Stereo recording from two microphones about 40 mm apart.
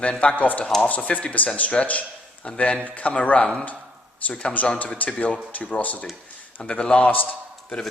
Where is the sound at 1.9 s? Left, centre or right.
Left.